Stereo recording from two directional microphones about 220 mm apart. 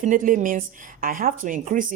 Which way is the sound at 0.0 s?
35° right (ahead or behind).